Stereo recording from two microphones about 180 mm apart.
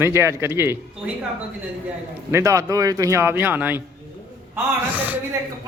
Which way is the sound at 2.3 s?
15° right (ahead or behind).